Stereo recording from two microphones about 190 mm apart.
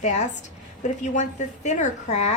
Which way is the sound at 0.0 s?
40° left (ahead or behind).